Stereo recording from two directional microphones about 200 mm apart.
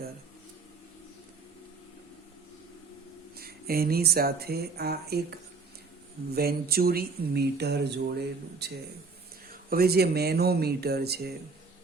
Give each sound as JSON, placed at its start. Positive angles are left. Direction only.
{"t": 3.3, "sound": "a man's voice", "side_deg": -50}